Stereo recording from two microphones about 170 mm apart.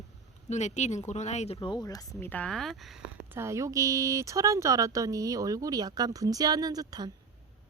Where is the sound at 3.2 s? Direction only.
15° right (ahead or behind).